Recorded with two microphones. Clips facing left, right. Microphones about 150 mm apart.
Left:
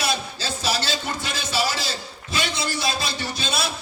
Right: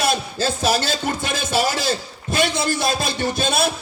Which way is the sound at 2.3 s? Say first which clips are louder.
Right 6 dB; 50° right (ahead or behind).